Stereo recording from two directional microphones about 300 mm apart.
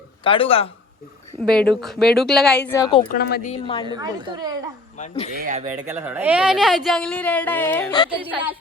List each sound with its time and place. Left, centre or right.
0.3 s speech: centre
1.5 s speech: centre
3.1 s speech: left
3.5 s a woman's voice: centre
3.8 s a woman's voice: centre
4.9 s speech: left
5.4 s speech: right
5.8 s speech: centre